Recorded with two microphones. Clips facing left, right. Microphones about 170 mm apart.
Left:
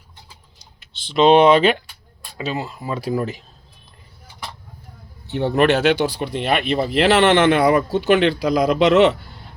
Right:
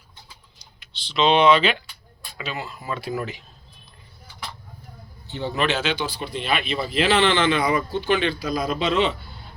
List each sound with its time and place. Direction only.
0.6 s speech: 50° left (ahead or behind)
2.6 s speech: 25° left (ahead or behind)
3.0 s speech: 35° left (ahead or behind)
5.3 s speech: 65° left (ahead or behind)